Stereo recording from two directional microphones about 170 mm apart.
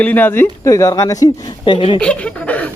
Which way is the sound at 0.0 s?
10° left (ahead or behind).